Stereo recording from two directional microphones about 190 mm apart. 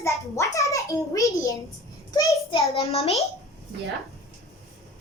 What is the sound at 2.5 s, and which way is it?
Speech, 30° left (ahead or behind).